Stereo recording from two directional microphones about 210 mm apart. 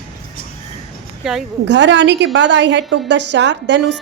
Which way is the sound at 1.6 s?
55° right (ahead or behind).